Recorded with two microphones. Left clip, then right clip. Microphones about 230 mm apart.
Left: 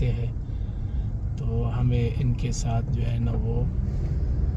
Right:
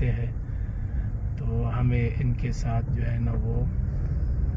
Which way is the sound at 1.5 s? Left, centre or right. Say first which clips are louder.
Even; left.